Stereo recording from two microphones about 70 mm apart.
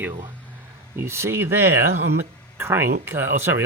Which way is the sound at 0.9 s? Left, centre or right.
Right.